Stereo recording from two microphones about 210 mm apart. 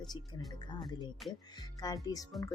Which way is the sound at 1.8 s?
20° left (ahead or behind).